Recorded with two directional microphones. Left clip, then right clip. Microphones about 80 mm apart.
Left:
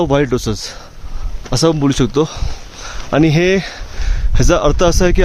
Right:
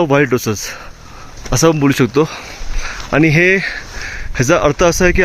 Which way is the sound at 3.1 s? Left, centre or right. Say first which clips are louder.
Right 2 dB; left.